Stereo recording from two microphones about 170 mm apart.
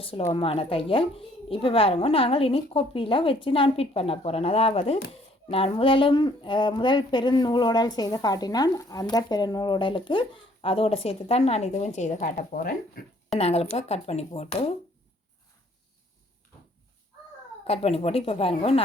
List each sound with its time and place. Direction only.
0.0 s a woman's voice: 35° left (ahead or behind); by 13.1 s 55° left (ahead or behind)
13.3 s a woman's voice: 35° left (ahead or behind)
17.7 s a woman's voice: 35° left (ahead or behind)